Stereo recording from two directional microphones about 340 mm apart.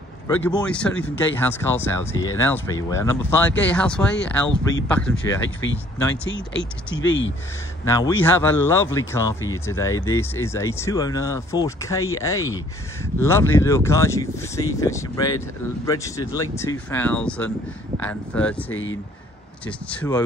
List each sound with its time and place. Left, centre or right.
0.4 s speech: centre
5.4 s speech: left
7.8 s speech: centre
18.7 s speech: left
19.6 s speech: centre